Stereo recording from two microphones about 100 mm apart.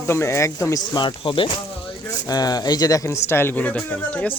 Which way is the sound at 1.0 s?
55° left (ahead or behind).